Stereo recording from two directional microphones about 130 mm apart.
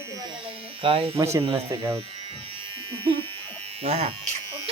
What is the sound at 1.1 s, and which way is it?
Snicker, 20° right (ahead or behind).